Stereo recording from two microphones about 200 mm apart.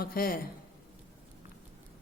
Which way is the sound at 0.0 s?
45° left (ahead or behind).